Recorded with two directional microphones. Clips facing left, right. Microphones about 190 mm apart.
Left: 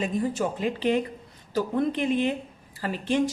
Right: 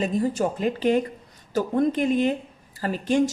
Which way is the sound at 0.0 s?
40° right (ahead or behind).